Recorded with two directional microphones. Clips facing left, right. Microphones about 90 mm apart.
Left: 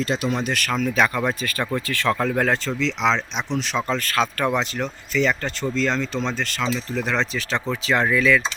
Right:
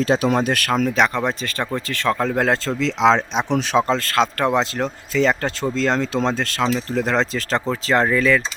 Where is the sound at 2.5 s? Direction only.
35° right (ahead or behind).